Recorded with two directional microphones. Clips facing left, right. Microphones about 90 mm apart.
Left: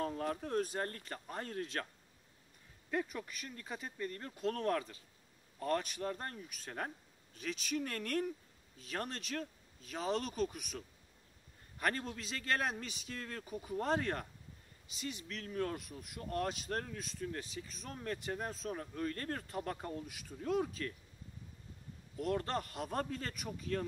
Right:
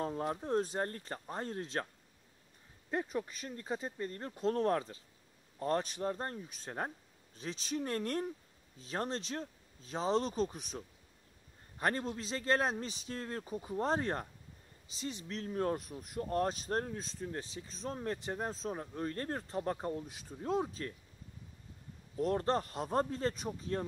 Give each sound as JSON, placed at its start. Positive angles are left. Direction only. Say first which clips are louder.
{"t": 0.0, "sound": "speech", "louder": "right 1 dB", "side_deg": -25}
{"t": 2.9, "sound": "a man's voice", "louder": "right 2 dB", "side_deg": -25}
{"t": 22.1, "sound": "a man's voice", "louder": "right 4 dB", "side_deg": -30}